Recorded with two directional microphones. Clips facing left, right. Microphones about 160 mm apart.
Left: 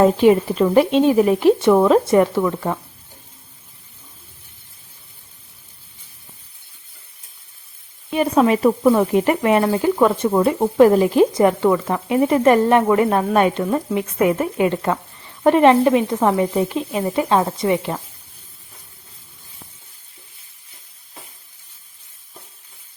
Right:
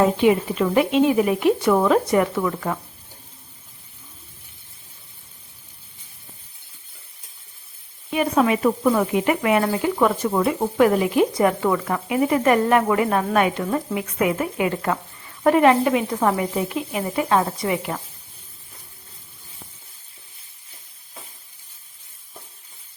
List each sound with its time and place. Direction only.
0.2 s speech: 40° left (ahead or behind)
2.4 s speech: 20° left (ahead or behind)
8.1 s speech: 35° left (ahead or behind)
12.0 s speech: 30° left (ahead or behind)